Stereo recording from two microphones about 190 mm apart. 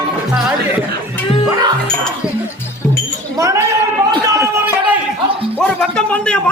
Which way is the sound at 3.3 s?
15° right (ahead or behind).